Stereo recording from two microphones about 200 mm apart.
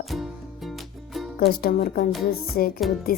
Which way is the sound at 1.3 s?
50° left (ahead or behind).